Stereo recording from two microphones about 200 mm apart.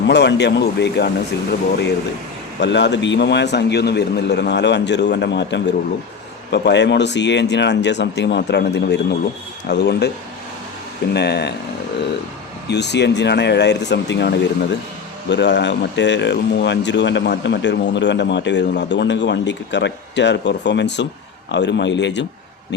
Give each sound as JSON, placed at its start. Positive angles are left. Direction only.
{"t": 0.1, "sound": "speech", "side_deg": 60}
{"t": 2.6, "sound": "speech", "side_deg": 60}
{"t": 11.1, "sound": "speech", "side_deg": 55}
{"t": 12.6, "sound": "speech", "side_deg": 60}